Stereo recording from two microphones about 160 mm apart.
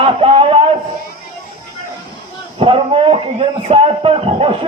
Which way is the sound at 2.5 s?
35° right (ahead or behind).